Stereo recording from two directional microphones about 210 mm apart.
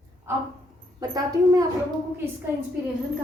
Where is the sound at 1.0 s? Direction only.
15° right (ahead or behind).